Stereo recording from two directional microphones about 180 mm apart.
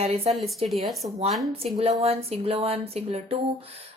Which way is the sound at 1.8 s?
35° right (ahead or behind).